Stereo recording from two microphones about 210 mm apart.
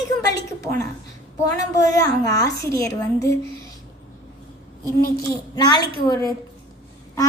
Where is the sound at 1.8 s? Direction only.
15° left (ahead or behind).